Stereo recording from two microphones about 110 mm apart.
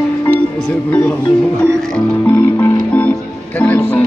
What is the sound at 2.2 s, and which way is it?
Music, 15° left (ahead or behind).